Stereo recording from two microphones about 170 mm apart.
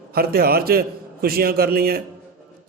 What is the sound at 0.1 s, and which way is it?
A man's voice, 60° right (ahead or behind).